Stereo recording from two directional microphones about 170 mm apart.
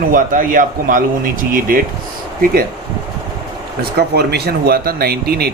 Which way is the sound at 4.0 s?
70° right (ahead or behind).